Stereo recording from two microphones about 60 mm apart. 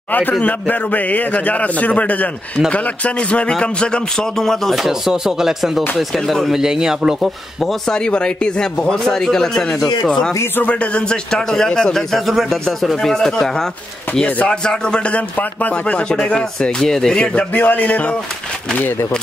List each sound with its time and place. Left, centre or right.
0.1 s a man's voice: left; by 4.7 s centre
4.8 s speech: centre
7.2 s speech: centre
8.0 s a man's voice: centre
10.6 s a man's voice: left; by 13.5 s centre
14.2 s a man's voice: left
17.6 s a man's voice: left